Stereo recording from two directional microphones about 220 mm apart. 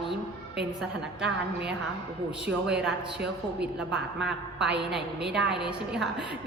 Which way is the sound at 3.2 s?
50° right (ahead or behind).